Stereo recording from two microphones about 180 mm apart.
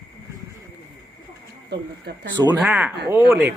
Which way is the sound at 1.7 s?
70° right (ahead or behind).